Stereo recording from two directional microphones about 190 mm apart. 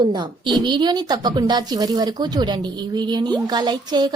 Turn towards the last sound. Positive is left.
turn(degrees=-20)  # may be behind; listen again after turning